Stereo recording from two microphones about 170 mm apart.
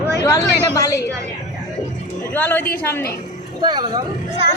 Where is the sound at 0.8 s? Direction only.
20° left (ahead or behind).